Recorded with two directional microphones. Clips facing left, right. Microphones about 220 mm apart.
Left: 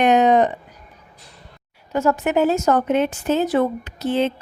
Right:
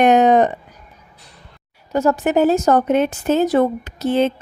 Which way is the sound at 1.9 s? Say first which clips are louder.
Right 2 dB; 35° right (ahead or behind).